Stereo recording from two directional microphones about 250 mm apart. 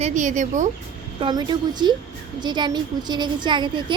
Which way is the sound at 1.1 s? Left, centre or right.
Centre.